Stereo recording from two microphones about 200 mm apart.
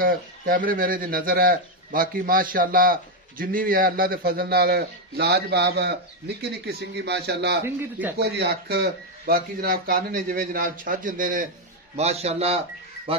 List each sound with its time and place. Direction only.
0.0 s speech: 45° right (ahead or behind)
12.0 s speech: 30° right (ahead or behind)